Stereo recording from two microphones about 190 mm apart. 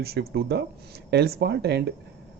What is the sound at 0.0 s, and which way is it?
Speech, 55° right (ahead or behind).